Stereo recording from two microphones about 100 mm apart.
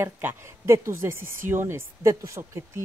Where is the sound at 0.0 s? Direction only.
25° right (ahead or behind).